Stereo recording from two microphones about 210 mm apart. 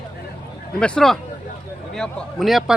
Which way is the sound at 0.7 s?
5° left (ahead or behind).